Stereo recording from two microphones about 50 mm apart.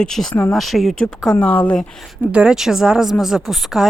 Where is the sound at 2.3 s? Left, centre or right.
Right.